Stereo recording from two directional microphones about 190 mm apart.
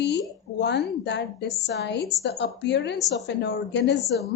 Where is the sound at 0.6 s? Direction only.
65° left (ahead or behind).